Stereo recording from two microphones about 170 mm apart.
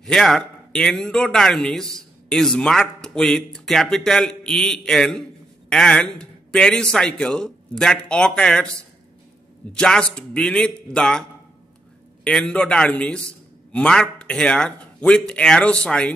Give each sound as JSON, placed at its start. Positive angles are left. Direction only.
{"t": 0.0, "sound": "speech", "side_deg": 0}
{"t": 9.7, "sound": "speech", "side_deg": 5}
{"t": 12.3, "sound": "speech", "side_deg": 5}